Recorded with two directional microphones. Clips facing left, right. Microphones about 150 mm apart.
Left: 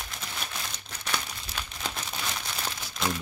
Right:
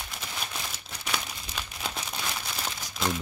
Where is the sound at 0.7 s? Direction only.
5° right (ahead or behind).